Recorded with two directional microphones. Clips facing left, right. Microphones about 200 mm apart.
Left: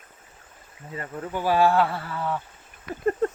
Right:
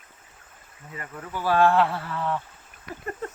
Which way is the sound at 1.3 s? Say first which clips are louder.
Even; 15° left (ahead or behind).